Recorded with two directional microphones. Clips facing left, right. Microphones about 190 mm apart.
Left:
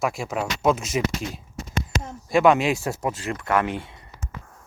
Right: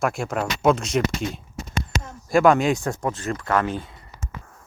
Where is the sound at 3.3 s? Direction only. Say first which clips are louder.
Even; 20° left (ahead or behind).